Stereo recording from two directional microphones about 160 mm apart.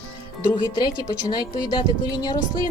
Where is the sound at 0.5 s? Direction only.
30° left (ahead or behind).